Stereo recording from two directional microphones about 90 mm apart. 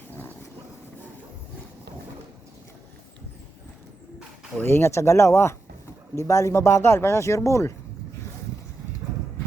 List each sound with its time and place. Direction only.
0.1 s dog: 20° left (ahead or behind)
4.6 s speech: 30° left (ahead or behind)